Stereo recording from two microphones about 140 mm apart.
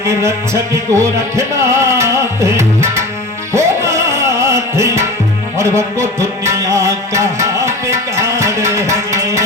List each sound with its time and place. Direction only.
0.0 s music: 20° right (ahead or behind)